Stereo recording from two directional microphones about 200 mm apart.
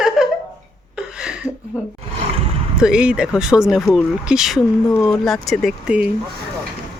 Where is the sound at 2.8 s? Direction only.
5° right (ahead or behind).